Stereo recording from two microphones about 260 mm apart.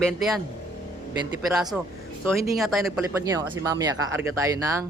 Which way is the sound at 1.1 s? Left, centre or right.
Centre.